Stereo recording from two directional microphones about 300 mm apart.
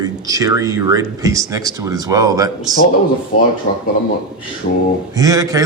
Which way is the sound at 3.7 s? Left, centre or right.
Left.